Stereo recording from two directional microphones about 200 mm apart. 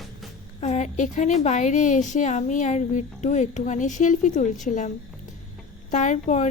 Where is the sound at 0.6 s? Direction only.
35° left (ahead or behind).